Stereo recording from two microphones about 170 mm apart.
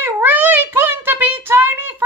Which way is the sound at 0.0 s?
10° right (ahead or behind).